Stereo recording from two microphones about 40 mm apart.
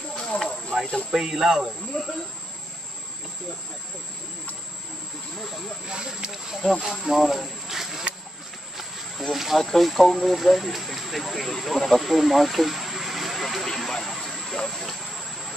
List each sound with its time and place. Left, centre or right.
0.3 s speech: left
0.7 s speech: centre
1.1 s speech: centre
2.0 s speech: left
5.9 s speech: centre
6.8 s speech: centre
9.3 s speech: centre
13.7 s a sound: centre
14.1 s vehicle: centre